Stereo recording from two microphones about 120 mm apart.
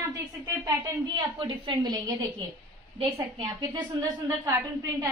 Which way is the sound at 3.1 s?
25° right (ahead or behind).